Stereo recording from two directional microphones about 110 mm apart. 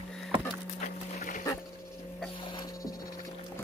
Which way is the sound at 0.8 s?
90° left.